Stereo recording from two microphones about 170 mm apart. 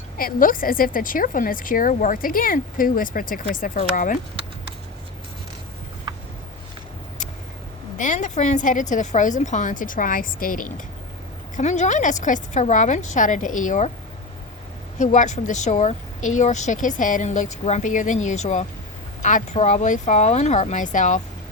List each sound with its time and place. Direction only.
0.2 s a woman's voice: 55° left (ahead or behind)
7.9 s a woman's voice: 45° left (ahead or behind)
14.9 s a woman's voice: 45° left (ahead or behind)